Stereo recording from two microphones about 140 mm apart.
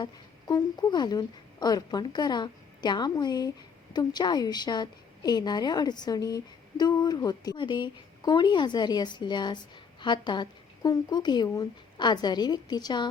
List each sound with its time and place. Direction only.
0.0 s a woman's voice: 30° left (ahead or behind)